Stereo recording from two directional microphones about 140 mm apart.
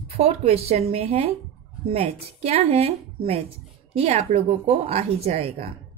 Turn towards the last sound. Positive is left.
turn(degrees=-45)  # may be behind; listen again after turning